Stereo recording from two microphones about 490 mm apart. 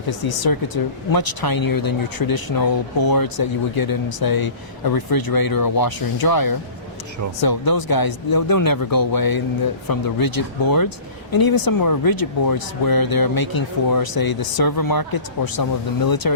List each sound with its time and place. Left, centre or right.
0.1 s speech: left